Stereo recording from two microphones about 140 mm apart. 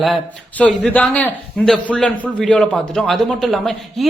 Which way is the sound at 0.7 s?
Centre (ahead or behind).